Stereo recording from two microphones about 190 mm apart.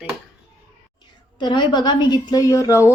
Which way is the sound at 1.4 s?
25° left (ahead or behind).